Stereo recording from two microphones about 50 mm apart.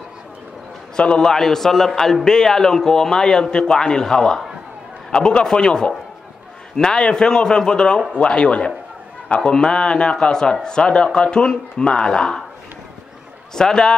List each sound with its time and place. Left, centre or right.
0.9 s speech: centre
1.3 s a man's voice: centre
13.6 s a man's voice: centre